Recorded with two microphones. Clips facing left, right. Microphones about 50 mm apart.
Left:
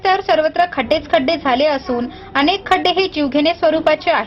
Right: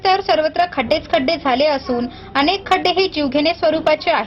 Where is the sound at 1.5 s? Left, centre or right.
Left.